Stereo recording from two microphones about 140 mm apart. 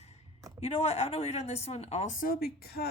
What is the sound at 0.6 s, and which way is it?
A woman's voice, 50° left (ahead or behind).